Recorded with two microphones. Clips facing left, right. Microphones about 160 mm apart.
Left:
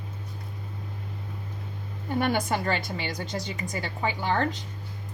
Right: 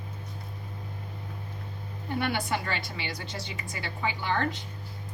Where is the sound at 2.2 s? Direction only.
45° left (ahead or behind).